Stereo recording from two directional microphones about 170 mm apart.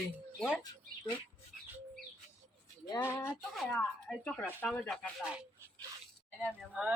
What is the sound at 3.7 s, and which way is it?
Speech, 5° left (ahead or behind).